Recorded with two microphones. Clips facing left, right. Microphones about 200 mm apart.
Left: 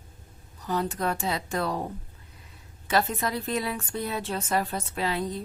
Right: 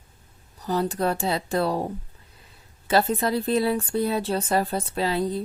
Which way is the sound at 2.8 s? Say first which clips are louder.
Right 5 dB; 30° right (ahead or behind).